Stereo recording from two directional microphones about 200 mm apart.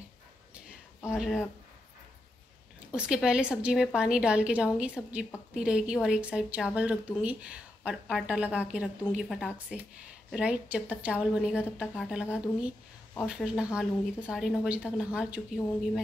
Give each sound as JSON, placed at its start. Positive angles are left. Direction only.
{"t": 1.0, "sound": "a woman's voice", "side_deg": -5}
{"t": 2.9, "sound": "a woman's voice", "side_deg": -5}